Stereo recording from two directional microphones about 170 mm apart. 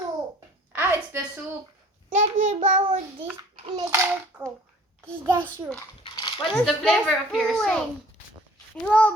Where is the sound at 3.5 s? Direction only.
30° right (ahead or behind).